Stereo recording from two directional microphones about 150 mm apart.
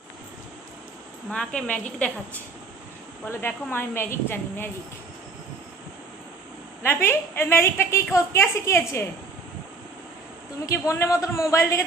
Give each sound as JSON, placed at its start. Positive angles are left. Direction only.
{"t": 1.3, "sound": "a woman's voice", "side_deg": 5}
{"t": 3.2, "sound": "a woman's voice", "side_deg": 15}
{"t": 6.8, "sound": "a woman's voice", "side_deg": 15}
{"t": 10.7, "sound": "a man's voice", "side_deg": 20}